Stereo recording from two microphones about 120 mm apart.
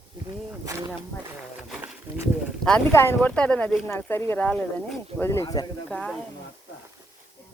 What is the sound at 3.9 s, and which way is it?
Speech, 20° left (ahead or behind).